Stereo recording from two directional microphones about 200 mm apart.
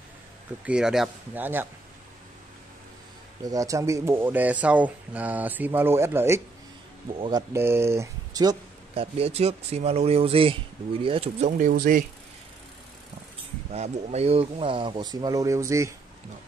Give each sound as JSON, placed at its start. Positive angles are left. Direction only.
{"t": 0.7, "sound": "speech", "side_deg": -5}
{"t": 3.4, "sound": "speech", "side_deg": -15}
{"t": 7.2, "sound": "speech", "side_deg": -25}
{"t": 7.5, "sound": "speech", "side_deg": -10}
{"t": 9.0, "sound": "speech", "side_deg": -30}
{"t": 11.5, "sound": "speech", "side_deg": -45}
{"t": 13.7, "sound": "speech", "side_deg": -35}